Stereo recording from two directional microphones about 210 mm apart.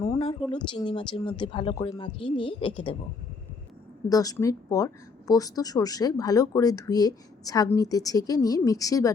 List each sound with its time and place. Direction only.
0.5 s speech: 20° left (ahead or behind)
4.1 s speech: 15° left (ahead or behind)